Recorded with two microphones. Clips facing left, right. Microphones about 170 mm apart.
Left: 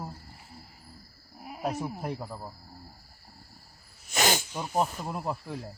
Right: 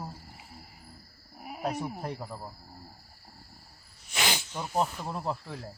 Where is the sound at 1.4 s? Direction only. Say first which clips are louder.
Right 1 dB; 5° right (ahead or behind).